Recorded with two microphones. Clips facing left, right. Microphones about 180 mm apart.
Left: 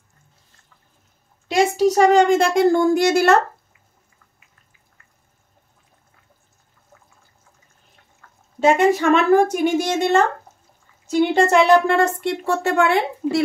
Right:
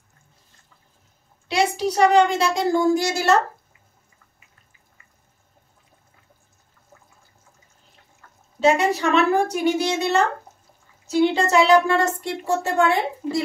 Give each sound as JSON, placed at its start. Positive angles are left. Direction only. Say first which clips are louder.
{"t": 1.5, "sound": "a child's voice", "louder": "left 5 dB", "side_deg": 45}
{"t": 8.5, "sound": "a child's voice", "louder": "left 3 dB", "side_deg": 50}